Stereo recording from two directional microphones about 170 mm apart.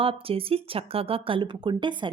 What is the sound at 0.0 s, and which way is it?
Speech, 35° right (ahead or behind).